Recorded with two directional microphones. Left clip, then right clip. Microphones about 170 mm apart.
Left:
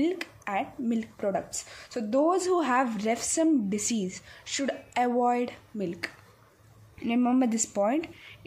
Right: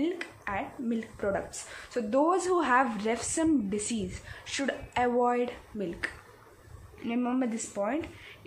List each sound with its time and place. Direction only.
0.0 s speech: 40° left (ahead or behind)